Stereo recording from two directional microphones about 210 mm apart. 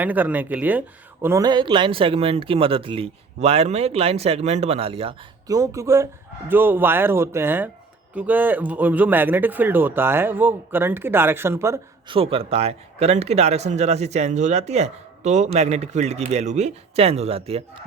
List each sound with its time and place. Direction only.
0.0 s a man's voice: 10° right (ahead or behind)
12.1 s speech: 25° right (ahead or behind)